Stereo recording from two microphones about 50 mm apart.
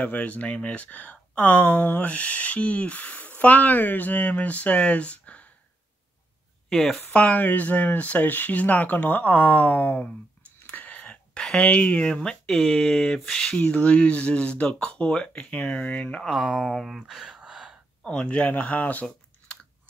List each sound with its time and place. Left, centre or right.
0.0 s speech: left
6.7 s speech: centre
7.1 s speech: left
10.7 s a sound: left
11.5 s speech: left
12.4 s speech: centre
13.6 s speech: left
16.3 s speech: right
16.6 s speech: centre
17.0 s speech: centre
17.4 s gasp: centre
18.0 s speech: centre
18.5 s speech: left
19.0 s typing: centre